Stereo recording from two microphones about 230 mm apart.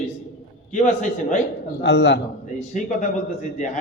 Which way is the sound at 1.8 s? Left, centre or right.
Left.